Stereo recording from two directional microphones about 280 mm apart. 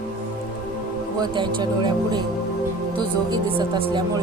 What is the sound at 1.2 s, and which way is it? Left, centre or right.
Speech, centre.